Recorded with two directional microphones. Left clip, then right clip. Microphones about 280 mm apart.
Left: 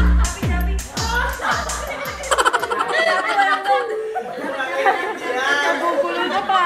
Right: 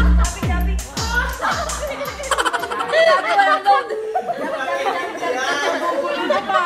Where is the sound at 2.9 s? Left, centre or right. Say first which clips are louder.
Right 6 dB; right.